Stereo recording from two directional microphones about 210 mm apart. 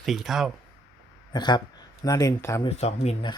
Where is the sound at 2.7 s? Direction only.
30° left (ahead or behind).